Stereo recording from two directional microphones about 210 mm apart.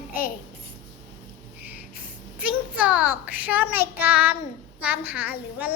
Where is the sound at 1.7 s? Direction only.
5° right (ahead or behind).